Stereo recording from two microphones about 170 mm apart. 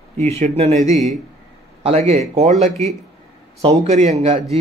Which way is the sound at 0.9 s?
Centre (ahead or behind).